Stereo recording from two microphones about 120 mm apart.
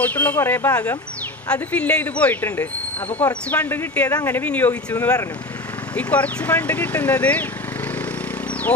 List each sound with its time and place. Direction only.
0.0 s speech: 10° left (ahead or behind)